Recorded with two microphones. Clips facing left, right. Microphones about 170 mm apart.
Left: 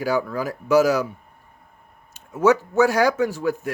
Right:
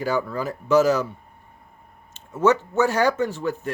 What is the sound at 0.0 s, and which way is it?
Speech, 10° left (ahead or behind).